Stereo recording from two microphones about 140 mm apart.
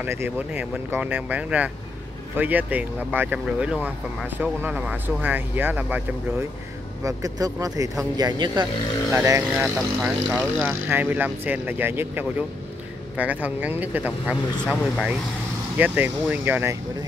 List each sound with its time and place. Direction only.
0.0 s speech: 15° right (ahead or behind)
7.0 s speech: 25° right (ahead or behind)
9.4 s speech: 10° right (ahead or behind)
14.6 s speech: 5° left (ahead or behind)
15.8 s speech: 15° right (ahead or behind)